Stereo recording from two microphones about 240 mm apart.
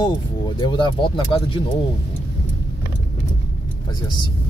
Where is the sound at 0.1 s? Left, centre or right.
Centre.